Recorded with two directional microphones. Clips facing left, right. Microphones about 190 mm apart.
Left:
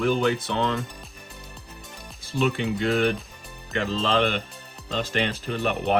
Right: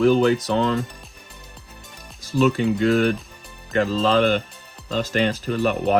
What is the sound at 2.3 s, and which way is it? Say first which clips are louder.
Speech: right 6 dB; 40° right (ahead or behind).